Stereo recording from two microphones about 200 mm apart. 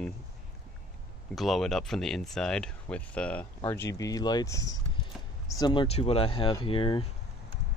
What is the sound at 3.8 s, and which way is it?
Speech, 15° left (ahead or behind).